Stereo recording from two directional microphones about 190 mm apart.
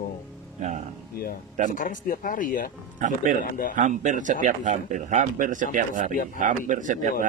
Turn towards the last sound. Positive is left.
turn(degrees=-45)  # may be behind; listen again after turning